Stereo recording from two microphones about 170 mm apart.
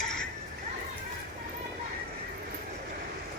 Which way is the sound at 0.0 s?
5° left (ahead or behind).